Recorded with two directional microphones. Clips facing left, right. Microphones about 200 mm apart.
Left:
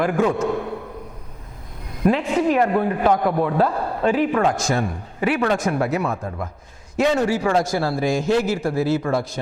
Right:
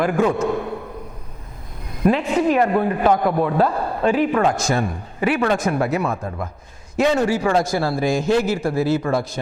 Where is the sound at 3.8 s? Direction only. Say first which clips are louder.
Right 1 dB; 25° right (ahead or behind).